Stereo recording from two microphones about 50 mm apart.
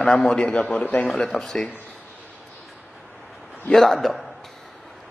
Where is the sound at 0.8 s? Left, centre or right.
Left.